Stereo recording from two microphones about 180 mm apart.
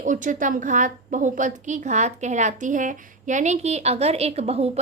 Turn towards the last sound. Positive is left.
turn(degrees=-35)  # may be behind; listen again after turning